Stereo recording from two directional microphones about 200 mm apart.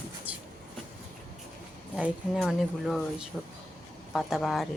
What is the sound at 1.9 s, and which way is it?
Speech, 5° right (ahead or behind).